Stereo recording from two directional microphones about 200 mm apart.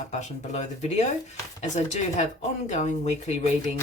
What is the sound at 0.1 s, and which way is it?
Speech, 35° left (ahead or behind).